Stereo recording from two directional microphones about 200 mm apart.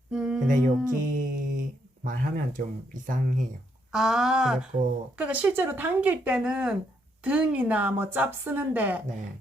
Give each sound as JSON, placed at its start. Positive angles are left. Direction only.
{"t": 0.1, "sound": "a sound", "side_deg": -5}
{"t": 0.4, "sound": "music", "side_deg": -40}
{"t": 0.9, "sound": "mantra", "side_deg": -40}
{"t": 2.0, "sound": "speech", "side_deg": -45}
{"t": 3.9, "sound": "a woman's voice", "side_deg": 0}